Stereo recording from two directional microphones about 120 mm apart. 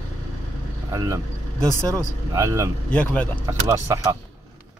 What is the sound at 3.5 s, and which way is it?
Speech, 25° right (ahead or behind).